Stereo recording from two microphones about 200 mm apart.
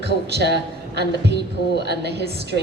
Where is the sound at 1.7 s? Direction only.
55° right (ahead or behind).